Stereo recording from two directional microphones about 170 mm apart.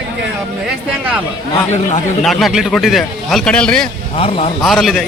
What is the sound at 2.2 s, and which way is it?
A man's voice, centre (ahead or behind).